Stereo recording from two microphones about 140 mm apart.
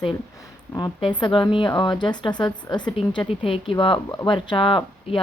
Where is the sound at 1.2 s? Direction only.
35° left (ahead or behind).